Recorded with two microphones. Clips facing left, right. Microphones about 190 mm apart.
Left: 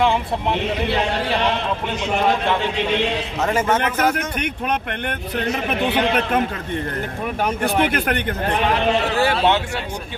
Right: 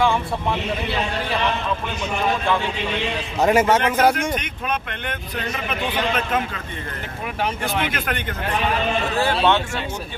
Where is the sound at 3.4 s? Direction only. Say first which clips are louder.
Right 4 dB; 10° right (ahead or behind).